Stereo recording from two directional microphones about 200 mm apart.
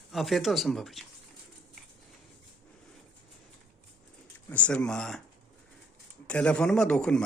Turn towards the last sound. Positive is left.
turn(degrees=5)  # may be behind; listen again after turning